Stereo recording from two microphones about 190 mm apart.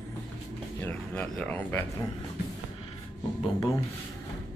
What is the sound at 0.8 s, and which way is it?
Speech, 5° left (ahead or behind).